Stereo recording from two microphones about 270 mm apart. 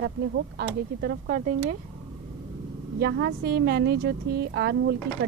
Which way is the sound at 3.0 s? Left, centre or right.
Right.